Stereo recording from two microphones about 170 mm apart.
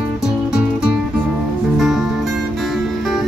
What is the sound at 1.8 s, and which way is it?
Music, centre (ahead or behind).